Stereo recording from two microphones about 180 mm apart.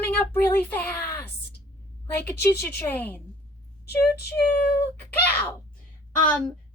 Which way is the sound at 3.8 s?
65° left (ahead or behind).